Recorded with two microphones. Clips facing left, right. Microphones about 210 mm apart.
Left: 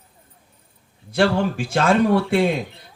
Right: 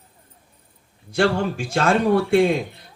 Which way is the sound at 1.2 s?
50° right (ahead or behind).